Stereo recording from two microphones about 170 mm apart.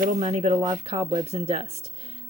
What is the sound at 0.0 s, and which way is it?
Speech, 45° right (ahead or behind).